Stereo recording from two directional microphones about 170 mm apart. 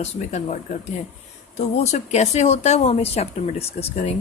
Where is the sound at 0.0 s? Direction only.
40° left (ahead or behind).